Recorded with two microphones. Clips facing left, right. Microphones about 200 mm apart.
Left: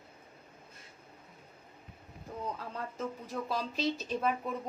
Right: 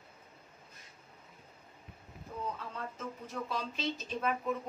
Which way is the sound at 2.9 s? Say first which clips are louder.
Left 3 dB; 35° left (ahead or behind).